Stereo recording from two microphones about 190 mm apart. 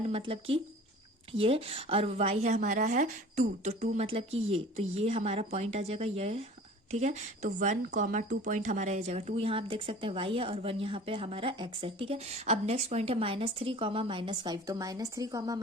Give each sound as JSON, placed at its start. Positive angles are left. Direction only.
{"t": 0.1, "sound": "a woman's voice", "side_deg": -30}